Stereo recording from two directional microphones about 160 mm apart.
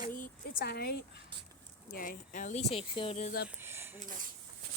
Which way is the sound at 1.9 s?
60° left (ahead or behind).